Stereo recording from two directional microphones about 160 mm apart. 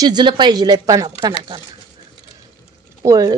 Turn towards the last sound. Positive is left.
turn(degrees=-20)  # may be behind; listen again after turning